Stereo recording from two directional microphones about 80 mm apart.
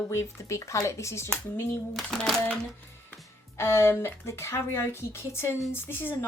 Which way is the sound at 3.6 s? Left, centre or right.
Left.